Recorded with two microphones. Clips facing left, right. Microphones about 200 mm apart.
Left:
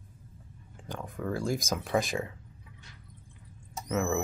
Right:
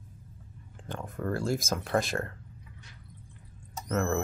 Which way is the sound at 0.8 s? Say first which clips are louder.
Right 1 dB; centre (ahead or behind).